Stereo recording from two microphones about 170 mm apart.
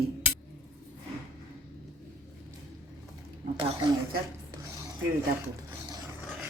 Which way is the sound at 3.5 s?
30° right (ahead or behind).